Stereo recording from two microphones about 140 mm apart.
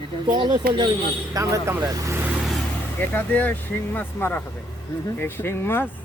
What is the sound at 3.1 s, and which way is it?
A man's voice, 10° left (ahead or behind).